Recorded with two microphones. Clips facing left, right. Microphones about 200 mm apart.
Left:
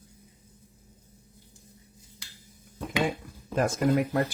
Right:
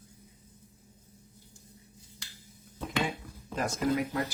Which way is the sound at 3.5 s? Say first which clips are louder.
Left 5 dB; 50° left (ahead or behind).